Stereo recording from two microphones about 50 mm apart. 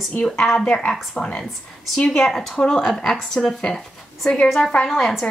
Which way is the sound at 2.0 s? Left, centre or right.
Centre.